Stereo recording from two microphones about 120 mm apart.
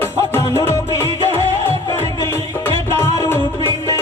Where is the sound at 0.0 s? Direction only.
20° left (ahead or behind).